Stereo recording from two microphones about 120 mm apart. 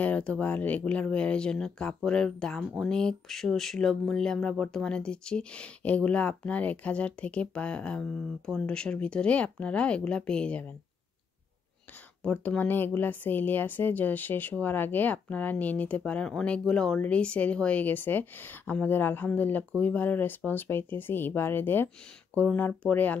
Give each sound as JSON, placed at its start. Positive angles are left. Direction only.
{"t": 0.0, "sound": "speech", "side_deg": 10}
{"t": 12.2, "sound": "speech", "side_deg": 10}